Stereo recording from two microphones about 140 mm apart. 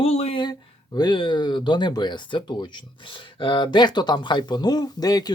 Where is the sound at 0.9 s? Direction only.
35° left (ahead or behind).